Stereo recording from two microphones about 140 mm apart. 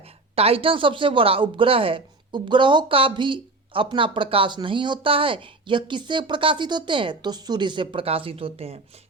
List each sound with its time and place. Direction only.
0.3 s speech: 45° right (ahead or behind)